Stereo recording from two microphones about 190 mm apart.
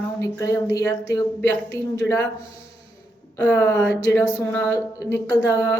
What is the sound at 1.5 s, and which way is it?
Speech, 65° right (ahead or behind).